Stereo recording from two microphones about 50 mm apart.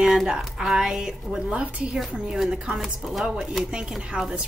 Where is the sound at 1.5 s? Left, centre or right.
Right.